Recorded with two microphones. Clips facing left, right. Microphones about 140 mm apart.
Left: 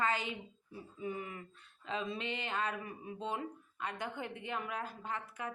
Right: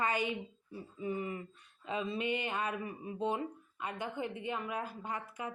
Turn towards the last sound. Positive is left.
turn(degrees=-10)  # may be behind; listen again after turning